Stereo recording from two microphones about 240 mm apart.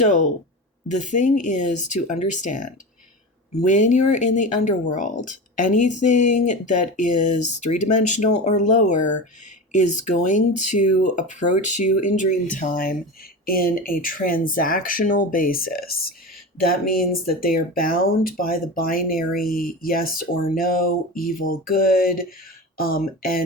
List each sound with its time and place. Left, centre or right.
0.9 s speech: left